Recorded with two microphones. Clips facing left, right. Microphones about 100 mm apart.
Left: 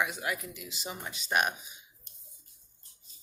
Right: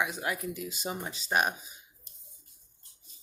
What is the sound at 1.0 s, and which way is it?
Speech, 30° right (ahead or behind).